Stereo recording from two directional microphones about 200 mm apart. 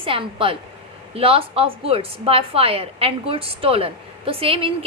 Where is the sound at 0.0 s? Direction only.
25° right (ahead or behind).